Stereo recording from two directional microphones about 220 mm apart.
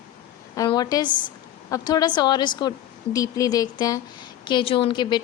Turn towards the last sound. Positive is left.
turn(degrees=20)  # may be behind; listen again after turning